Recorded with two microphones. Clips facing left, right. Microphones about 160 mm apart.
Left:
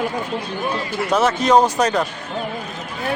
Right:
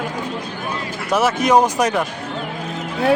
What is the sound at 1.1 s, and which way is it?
Speech, 10° right (ahead or behind).